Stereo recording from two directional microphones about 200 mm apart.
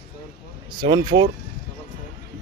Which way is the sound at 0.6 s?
25° right (ahead or behind).